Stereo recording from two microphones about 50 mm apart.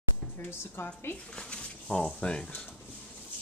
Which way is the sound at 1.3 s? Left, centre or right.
Centre.